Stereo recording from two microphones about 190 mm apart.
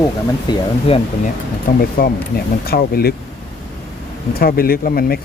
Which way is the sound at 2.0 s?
50° left (ahead or behind).